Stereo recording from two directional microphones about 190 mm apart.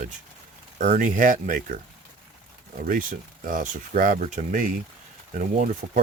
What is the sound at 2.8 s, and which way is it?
Speech, 45° right (ahead or behind).